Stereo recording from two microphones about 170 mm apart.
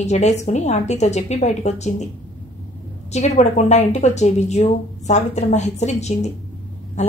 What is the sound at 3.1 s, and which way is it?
A woman's voice, 40° left (ahead or behind).